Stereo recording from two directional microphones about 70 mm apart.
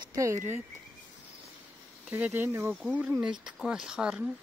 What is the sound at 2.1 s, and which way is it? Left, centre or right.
Speech, right.